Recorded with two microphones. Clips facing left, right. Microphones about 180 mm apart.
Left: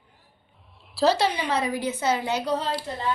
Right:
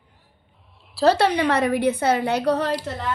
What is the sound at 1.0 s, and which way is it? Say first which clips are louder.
A woman's voice: right 5 dB; 60° right (ahead or behind).